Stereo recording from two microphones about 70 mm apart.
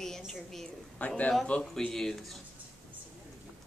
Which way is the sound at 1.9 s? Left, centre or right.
Centre.